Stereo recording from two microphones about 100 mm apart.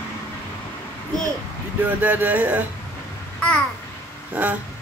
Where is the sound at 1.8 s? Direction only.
20° right (ahead or behind).